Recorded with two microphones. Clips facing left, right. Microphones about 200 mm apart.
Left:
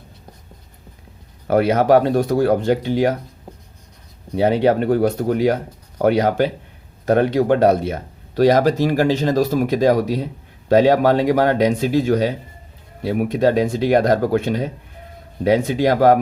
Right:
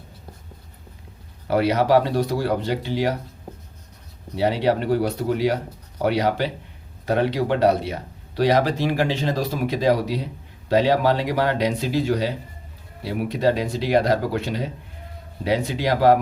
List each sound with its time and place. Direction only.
1.5 s speech: 50° left (ahead or behind)
4.4 s speech: 50° left (ahead or behind)